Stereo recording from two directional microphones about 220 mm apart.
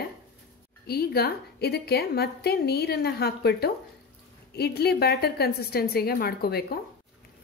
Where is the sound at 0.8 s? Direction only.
45° left (ahead or behind).